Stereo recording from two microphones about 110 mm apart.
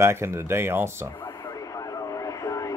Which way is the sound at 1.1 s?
30° left (ahead or behind).